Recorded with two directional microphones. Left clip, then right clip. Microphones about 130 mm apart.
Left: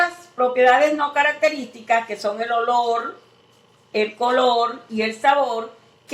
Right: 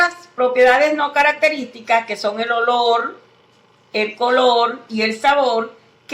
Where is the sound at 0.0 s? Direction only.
35° right (ahead or behind).